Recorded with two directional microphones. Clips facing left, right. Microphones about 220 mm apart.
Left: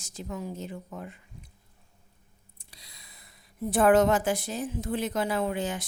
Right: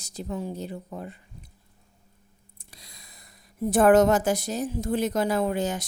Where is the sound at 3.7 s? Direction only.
45° right (ahead or behind).